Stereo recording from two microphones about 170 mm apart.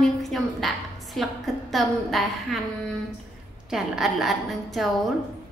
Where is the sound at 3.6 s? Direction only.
5° right (ahead or behind).